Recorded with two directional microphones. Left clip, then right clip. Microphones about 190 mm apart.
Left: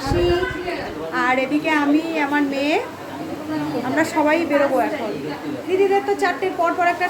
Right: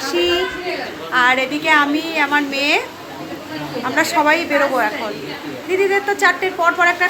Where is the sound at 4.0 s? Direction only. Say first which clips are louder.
Right 4 dB; 15° left (ahead or behind).